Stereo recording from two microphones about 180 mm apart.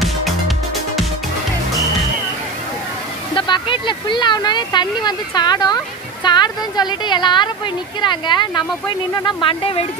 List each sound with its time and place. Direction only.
3.3 s a woman's voice: 25° left (ahead or behind)